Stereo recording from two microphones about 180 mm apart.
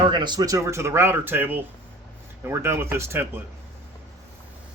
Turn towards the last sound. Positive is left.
turn(degrees=-15)  # may be behind; listen again after turning